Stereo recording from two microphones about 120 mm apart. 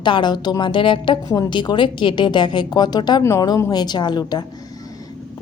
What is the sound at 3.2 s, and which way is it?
A woman's voice, 25° left (ahead or behind).